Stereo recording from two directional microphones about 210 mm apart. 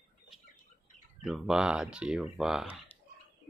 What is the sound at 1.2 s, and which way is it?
Speech, centre (ahead or behind).